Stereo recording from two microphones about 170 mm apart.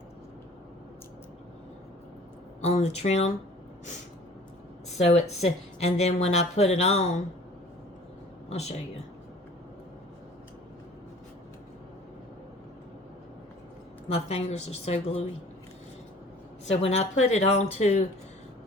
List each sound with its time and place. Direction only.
2.6 s a woman's voice: 40° left (ahead or behind)
4.9 s a woman's voice: 40° left (ahead or behind)
8.4 s speech: 40° left (ahead or behind)
14.1 s a woman's voice: 35° left (ahead or behind)
16.6 s a woman's voice: 40° left (ahead or behind)